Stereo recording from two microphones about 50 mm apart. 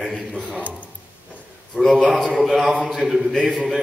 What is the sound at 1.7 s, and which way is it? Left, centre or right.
Speech, centre.